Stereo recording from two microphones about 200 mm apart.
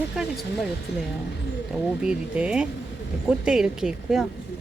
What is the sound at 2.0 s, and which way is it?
Speech, 5° right (ahead or behind).